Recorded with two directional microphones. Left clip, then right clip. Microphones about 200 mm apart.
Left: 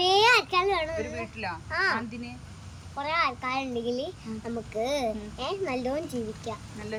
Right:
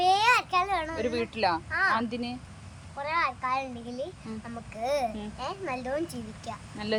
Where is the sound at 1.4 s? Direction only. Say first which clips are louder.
Right 9 dB; 30° right (ahead or behind).